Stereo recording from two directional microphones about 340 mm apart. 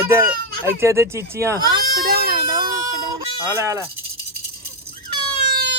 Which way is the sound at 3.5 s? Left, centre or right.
Centre.